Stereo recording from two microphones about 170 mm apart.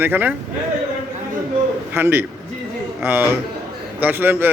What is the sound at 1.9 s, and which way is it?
A man's voice, 15° right (ahead or behind).